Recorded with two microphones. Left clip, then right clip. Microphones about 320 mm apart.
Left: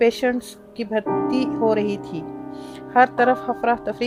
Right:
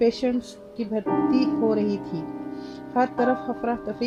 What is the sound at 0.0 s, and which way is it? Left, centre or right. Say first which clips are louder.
Speech: left 4 dB; left.